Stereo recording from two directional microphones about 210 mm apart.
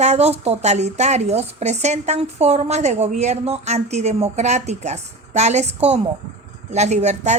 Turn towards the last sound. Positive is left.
turn(degrees=-35)  # may be behind; listen again after turning